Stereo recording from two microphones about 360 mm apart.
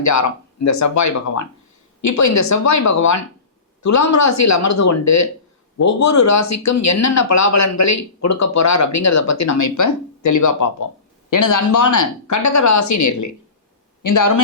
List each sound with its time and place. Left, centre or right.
0.0 s speech: left